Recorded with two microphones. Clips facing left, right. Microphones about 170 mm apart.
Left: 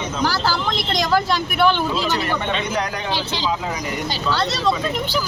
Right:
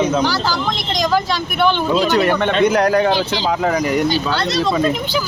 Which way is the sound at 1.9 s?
55° right (ahead or behind).